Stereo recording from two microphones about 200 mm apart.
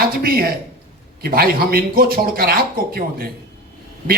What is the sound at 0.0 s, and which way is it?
A man's voice, 50° right (ahead or behind).